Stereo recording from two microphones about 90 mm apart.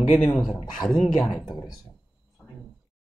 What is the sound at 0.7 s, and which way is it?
Speech, 5° left (ahead or behind).